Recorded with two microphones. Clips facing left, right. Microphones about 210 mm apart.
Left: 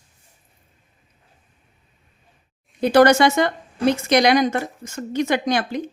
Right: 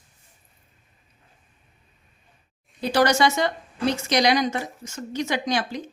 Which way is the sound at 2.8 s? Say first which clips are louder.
Left 6 dB; 55° left (ahead or behind).